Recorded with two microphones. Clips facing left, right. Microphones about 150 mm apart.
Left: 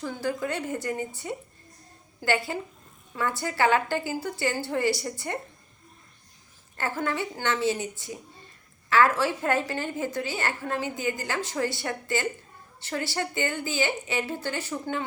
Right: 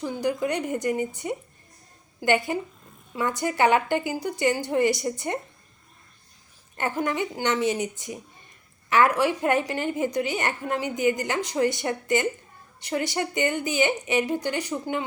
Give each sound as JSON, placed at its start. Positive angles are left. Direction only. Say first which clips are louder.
{"t": 0.0, "sound": "a woman's voice", "louder": "right 4 dB", "side_deg": -15}
{"t": 6.7, "sound": "a woman's voice", "louder": "right 3 dB", "side_deg": -20}